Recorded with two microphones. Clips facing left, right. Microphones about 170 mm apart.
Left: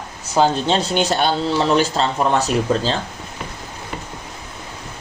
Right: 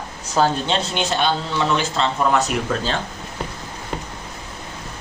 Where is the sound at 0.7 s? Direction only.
45° left (ahead or behind).